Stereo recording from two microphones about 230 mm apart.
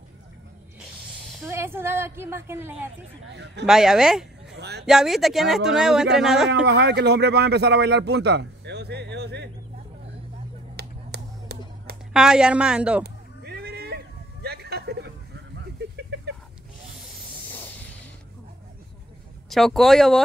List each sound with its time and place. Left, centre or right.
1.4 s a woman's voice: centre
3.3 s a man's voice: right
3.6 s speech: centre
4.6 s speech: right
4.8 s speech: centre
6.6 s a man's voice: right
10.8 s a sound: right
12.1 s speech: centre
13.0 s a sound: right
17.0 s vehicle: centre
19.5 s speech: centre